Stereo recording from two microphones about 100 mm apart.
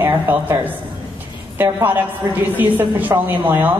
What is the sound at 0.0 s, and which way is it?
A woman's voice, 20° right (ahead or behind).